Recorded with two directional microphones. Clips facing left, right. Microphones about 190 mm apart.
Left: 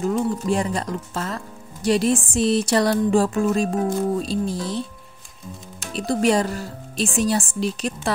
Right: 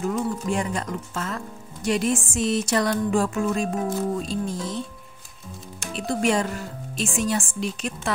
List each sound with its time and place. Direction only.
0.0 s speech: 30° left (ahead or behind)
5.9 s speech: 35° left (ahead or behind)